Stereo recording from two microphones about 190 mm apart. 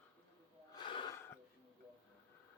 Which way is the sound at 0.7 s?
25° left (ahead or behind).